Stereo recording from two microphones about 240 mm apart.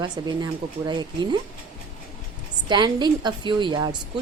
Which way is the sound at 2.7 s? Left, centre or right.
Centre.